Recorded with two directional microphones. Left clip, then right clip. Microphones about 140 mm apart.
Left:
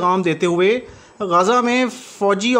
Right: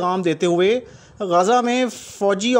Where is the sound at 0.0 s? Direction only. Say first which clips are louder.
Left 3 dB; 35° right (ahead or behind).